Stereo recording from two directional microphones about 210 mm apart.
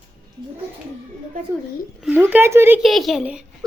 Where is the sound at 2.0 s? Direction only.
10° right (ahead or behind).